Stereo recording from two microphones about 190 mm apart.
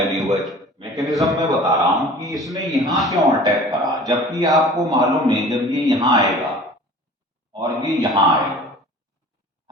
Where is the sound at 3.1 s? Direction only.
20° right (ahead or behind).